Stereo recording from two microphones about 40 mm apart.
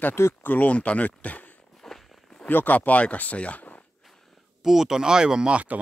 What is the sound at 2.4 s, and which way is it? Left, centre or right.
Speech, left.